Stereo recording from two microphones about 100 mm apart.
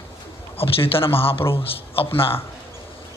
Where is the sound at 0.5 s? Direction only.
65° left (ahead or behind).